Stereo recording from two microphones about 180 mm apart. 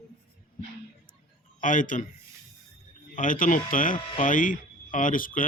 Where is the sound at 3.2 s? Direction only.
50° left (ahead or behind).